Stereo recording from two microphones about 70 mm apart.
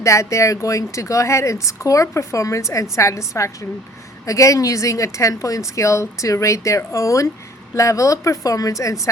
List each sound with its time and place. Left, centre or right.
0.0 s a woman's voice: left